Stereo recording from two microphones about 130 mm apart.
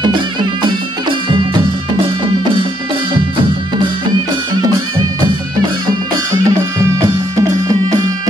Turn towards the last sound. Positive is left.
turn(degrees=-25)  # may be behind; listen again after turning